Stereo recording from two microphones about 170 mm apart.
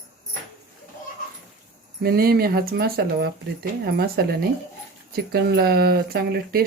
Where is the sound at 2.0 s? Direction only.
65° right (ahead or behind).